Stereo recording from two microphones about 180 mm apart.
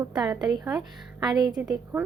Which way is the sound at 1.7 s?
10° right (ahead or behind).